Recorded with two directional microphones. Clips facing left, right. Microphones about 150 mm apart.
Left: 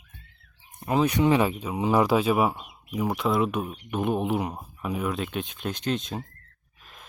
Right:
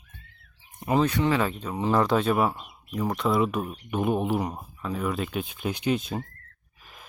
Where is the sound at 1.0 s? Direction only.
15° left (ahead or behind).